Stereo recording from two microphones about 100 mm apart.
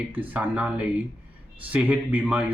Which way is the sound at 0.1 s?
15° right (ahead or behind).